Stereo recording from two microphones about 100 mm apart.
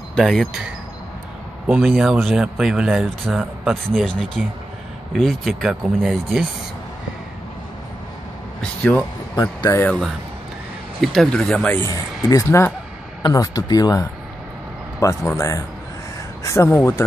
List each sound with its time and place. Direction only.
0.1 s speech: 5° left (ahead or behind)
1.7 s speech: 10° right (ahead or behind)
9.3 s speech: 40° left (ahead or behind)
11.0 s speech: 5° left (ahead or behind)
12.2 s speech: 35° left (ahead or behind)
13.2 s speech: 40° left (ahead or behind)